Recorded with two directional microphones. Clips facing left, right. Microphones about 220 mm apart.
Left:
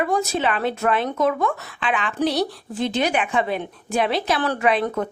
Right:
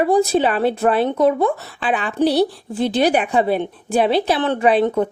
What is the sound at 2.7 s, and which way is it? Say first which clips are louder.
A woman's voice: right 5 dB; 35° right (ahead or behind).